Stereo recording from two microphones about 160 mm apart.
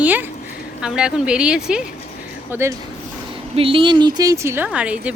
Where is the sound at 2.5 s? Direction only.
15° right (ahead or behind).